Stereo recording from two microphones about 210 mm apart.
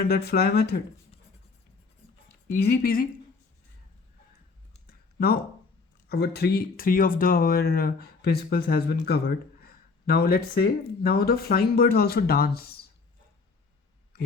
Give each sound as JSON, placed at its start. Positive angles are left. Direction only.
{"t": 0.0, "sound": "speech", "side_deg": 50}
{"t": 2.5, "sound": "speech", "side_deg": 45}
{"t": 4.9, "sound": "a sound", "side_deg": 45}
{"t": 6.1, "sound": "speech", "side_deg": 50}